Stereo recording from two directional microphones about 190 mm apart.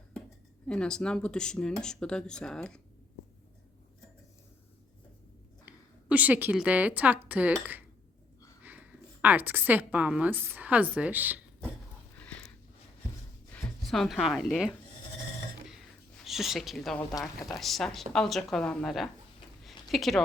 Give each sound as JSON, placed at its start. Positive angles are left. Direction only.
{"t": 0.7, "sound": "speech", "side_deg": 5}
{"t": 5.6, "sound": "a woman's voice", "side_deg": -10}
{"t": 12.1, "sound": "a sound", "side_deg": 5}
{"t": 13.5, "sound": "speech", "side_deg": 0}
{"t": 16.2, "sound": "speech", "side_deg": 0}
{"t": 17.2, "sound": "speech", "side_deg": 20}
{"t": 17.6, "sound": "speech", "side_deg": 0}
{"t": 19.6, "sound": "a sound", "side_deg": 0}